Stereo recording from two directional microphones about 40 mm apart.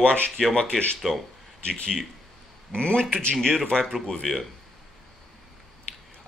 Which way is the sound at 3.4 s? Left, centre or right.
Centre.